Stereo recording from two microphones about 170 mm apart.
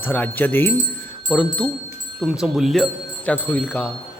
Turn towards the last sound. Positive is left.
turn(degrees=5)  # may be behind; listen again after turning